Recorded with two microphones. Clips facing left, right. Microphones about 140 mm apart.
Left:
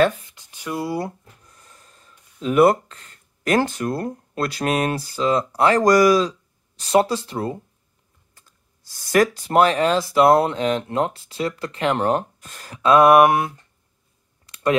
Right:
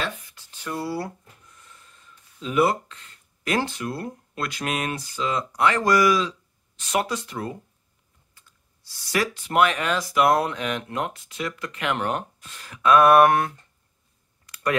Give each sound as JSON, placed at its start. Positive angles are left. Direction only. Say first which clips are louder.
{"t": 0.2, "sound": "a sound", "louder": "left 2 dB", "side_deg": 20}
{"t": 1.4, "sound": "speech", "louder": "left 1 dB", "side_deg": 40}
{"t": 8.4, "sound": "speech", "louder": "left 2 dB", "side_deg": 45}
{"t": 12.8, "sound": "mantra", "louder": "left 2 dB", "side_deg": 25}
{"t": 14.4, "sound": "clicking", "louder": "left 5 dB", "side_deg": 25}